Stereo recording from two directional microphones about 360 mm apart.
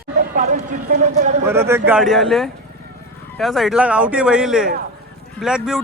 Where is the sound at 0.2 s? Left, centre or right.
Right.